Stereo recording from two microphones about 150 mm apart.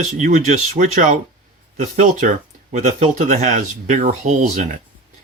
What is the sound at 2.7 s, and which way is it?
Speech, 55° right (ahead or behind).